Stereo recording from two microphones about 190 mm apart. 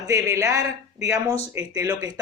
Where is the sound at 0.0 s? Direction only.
15° right (ahead or behind).